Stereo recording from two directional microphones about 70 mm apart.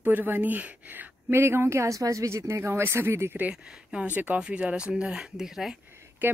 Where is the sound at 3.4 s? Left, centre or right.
Centre.